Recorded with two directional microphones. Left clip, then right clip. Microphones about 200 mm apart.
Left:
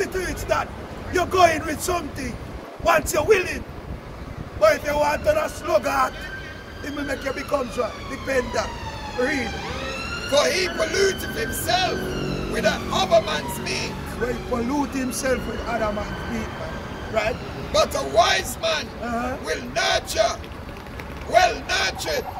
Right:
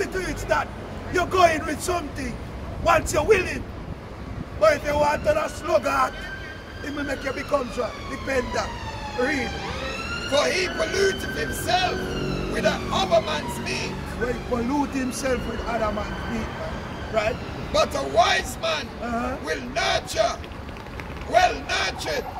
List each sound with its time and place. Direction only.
0.0 s vehicle: centre (ahead or behind)
1.1 s speech: centre (ahead or behind)
10.3 s speech: 20° left (ahead or behind)
14.5 s speech: 5° left (ahead or behind)
17.2 s speech: 5° left (ahead or behind)
17.7 s speech: 20° left (ahead or behind)
19.0 s speech: 5° left (ahead or behind)
19.4 s speech: 20° left (ahead or behind)